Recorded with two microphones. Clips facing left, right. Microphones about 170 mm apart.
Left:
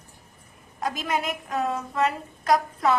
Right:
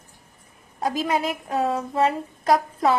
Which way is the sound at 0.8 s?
30° right (ahead or behind).